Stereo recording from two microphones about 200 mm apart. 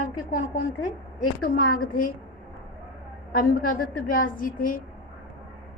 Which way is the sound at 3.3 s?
45° left (ahead or behind).